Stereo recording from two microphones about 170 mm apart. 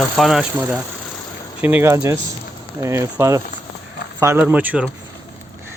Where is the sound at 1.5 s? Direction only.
10° right (ahead or behind).